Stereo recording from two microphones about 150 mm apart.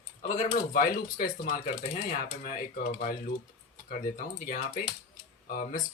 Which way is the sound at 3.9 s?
65° left (ahead or behind).